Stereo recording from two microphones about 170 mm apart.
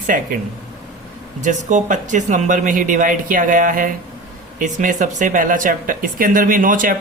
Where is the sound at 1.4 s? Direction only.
45° right (ahead or behind).